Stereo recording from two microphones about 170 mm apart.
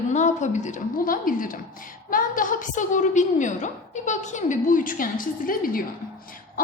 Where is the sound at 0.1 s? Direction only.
45° left (ahead or behind).